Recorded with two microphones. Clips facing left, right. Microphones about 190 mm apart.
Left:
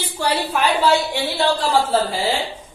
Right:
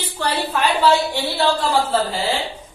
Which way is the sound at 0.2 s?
10° left (ahead or behind).